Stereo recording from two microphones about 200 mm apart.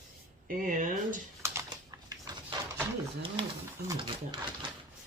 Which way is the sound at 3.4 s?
25° right (ahead or behind).